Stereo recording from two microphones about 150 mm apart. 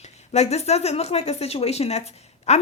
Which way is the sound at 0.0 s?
45° left (ahead or behind).